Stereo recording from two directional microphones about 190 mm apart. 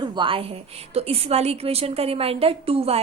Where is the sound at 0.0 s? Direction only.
25° right (ahead or behind).